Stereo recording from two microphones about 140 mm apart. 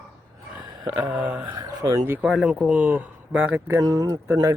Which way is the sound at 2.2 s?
5° right (ahead or behind).